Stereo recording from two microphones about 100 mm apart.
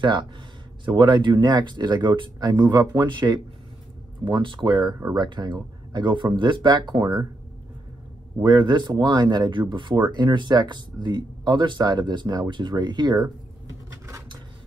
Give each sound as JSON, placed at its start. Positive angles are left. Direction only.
{"t": 0.0, "sound": "speech", "side_deg": -50}
{"t": 8.4, "sound": "speech", "side_deg": -50}